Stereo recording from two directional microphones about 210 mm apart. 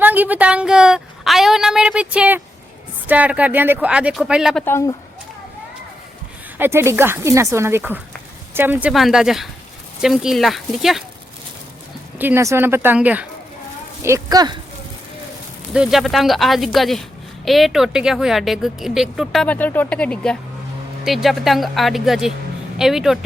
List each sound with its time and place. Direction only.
0.0 s a sound: 10° right (ahead or behind)
3.1 s a woman's voice: 5° right (ahead or behind)
4.6 s speech: 15° left (ahead or behind)
6.6 s a woman's voice: 10° right (ahead or behind)
12.2 s speech: 10° right (ahead or behind)
15.7 s a woman's voice: centre (ahead or behind)